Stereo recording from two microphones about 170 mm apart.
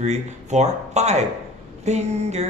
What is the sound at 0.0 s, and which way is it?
Speech, 40° right (ahead or behind).